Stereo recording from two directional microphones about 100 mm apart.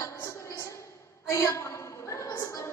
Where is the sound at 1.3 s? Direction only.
30° left (ahead or behind).